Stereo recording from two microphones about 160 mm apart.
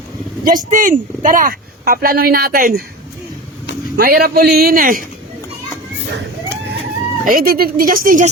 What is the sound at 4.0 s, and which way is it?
A man's voice, 75° right (ahead or behind).